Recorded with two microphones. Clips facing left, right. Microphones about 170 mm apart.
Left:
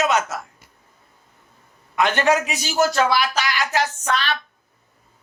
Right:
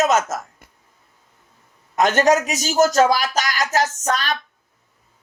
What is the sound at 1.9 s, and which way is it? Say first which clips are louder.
Speech: right 3 dB; 40° right (ahead or behind).